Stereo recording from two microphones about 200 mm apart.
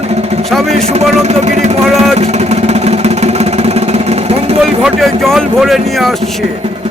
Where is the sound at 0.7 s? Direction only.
30° right (ahead or behind).